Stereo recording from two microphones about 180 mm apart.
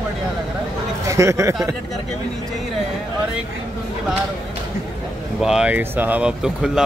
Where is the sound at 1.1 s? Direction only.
15° right (ahead or behind).